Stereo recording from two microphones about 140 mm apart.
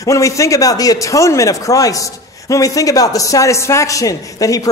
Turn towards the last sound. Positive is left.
turn(degrees=25)  # may be behind; listen again after turning